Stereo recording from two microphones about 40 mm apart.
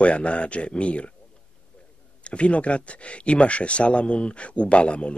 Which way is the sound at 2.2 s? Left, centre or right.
Left.